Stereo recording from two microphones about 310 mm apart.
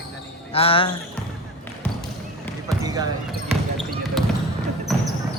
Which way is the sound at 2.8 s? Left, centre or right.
Centre.